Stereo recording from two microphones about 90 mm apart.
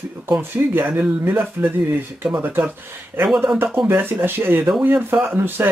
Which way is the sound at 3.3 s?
5° right (ahead or behind).